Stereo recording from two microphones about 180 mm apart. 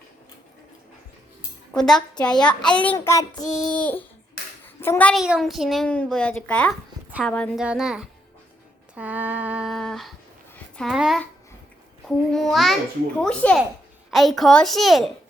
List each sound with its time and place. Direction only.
1.7 s a child's voice: 5° left (ahead or behind)
3.0 s child singing: 15° left (ahead or behind)
4.6 s a sound: 10° left (ahead or behind)
5.2 s a child's voice: centre (ahead or behind)
7.6 s a child's voice: 5° right (ahead or behind)
9.0 s a sound: 10° right (ahead or behind)
10.8 s a child's voice: centre (ahead or behind)